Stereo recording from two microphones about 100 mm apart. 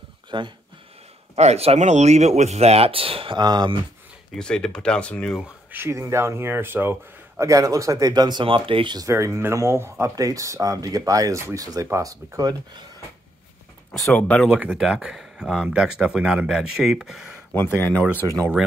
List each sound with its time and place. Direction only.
0.3 s speech: 50° right (ahead or behind)
1.3 s speech: 90° right; by 3.3 s 65° right (ahead or behind)
3.3 s speech: 45° right (ahead or behind)
4.4 s speech: 10° left (ahead or behind)
5.7 s speech: 25° right (ahead or behind); by 8.5 s 45° right (ahead or behind)
8.5 s speech: 60° right (ahead or behind)
9.1 s speech: 25° right (ahead or behind)
14.1 s speech: 10° left (ahead or behind)
14.5 s speech: 10° right (ahead or behind)
17.5 s speech: 20° left (ahead or behind)